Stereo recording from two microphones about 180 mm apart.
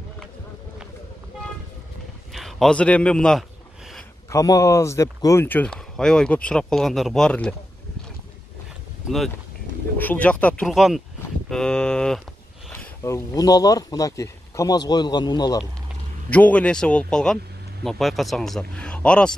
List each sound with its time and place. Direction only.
2.3 s a man's voice: centre (ahead or behind)
4.3 s speech: 20° left (ahead or behind)
9.0 s speech: centre (ahead or behind)
13.0 s speech: 20° left (ahead or behind)
16.3 s speech: 10° left (ahead or behind)